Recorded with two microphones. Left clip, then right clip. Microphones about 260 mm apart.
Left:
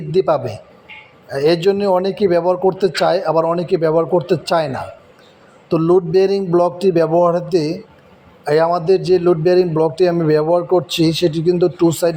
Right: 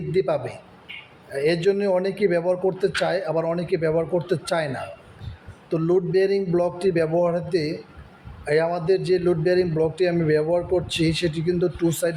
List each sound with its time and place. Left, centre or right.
0.1 s a man's voice: centre